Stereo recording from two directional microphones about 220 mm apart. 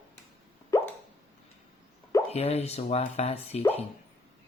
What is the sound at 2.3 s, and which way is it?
Speech, 30° left (ahead or behind).